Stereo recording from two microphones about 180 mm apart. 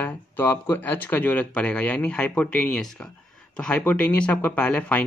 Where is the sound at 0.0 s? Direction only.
10° left (ahead or behind).